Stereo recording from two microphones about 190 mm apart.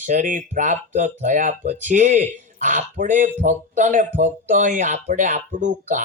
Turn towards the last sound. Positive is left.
turn(degrees=-40)  # may be behind; listen again after turning